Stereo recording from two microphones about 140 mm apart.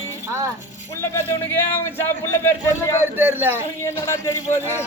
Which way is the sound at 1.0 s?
15° left (ahead or behind).